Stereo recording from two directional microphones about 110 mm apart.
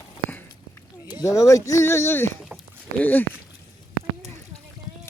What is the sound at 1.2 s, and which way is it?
Speech, 30° left (ahead or behind).